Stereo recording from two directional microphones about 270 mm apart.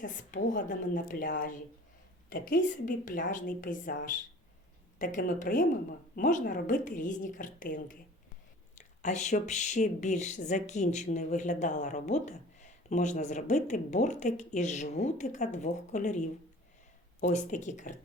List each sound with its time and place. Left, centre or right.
0.0 s speech: left